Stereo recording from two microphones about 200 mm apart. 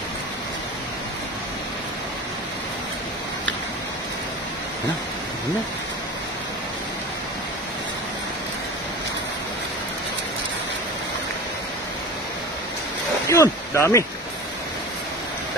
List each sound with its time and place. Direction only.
13.3 s speech: 15° left (ahead or behind)